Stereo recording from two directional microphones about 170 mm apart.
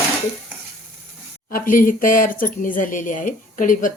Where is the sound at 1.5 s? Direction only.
55° left (ahead or behind).